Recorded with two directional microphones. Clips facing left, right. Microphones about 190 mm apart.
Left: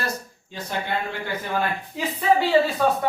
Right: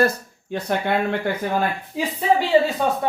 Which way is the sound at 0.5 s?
60° right (ahead or behind).